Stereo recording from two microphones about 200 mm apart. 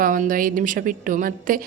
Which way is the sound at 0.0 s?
45° right (ahead or behind).